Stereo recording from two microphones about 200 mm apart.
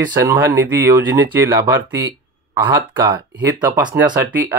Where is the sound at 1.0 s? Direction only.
65° right (ahead or behind).